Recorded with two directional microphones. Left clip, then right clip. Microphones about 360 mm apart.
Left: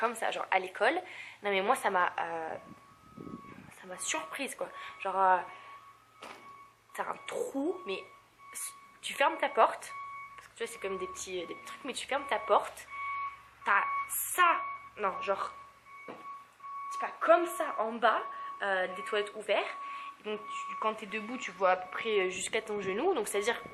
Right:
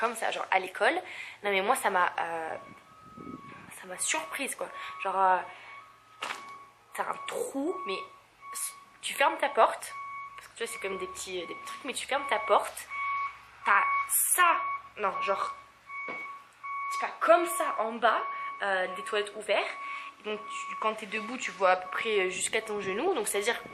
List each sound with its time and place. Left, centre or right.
0.0 s speech: centre
3.8 s speech: centre
6.9 s speech: centre
7.4 s speech: centre
9.0 s a woman's voice: centre
17.0 s speech: centre